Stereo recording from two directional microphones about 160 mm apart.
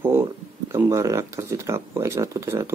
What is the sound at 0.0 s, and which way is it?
Speech, 15° right (ahead or behind).